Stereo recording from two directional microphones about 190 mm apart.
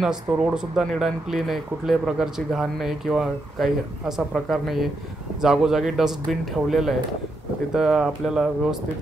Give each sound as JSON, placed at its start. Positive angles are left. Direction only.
{"t": 0.0, "sound": "speech", "side_deg": -5}